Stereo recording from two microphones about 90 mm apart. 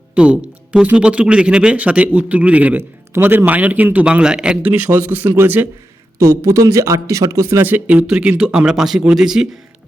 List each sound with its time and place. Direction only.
0.1 s a man's voice: 15° right (ahead or behind)